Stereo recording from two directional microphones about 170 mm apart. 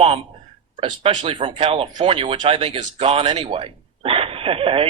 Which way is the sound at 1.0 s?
30° right (ahead or behind).